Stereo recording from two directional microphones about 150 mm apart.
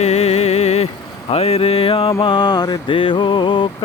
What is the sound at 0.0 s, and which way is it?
Music, 45° left (ahead or behind).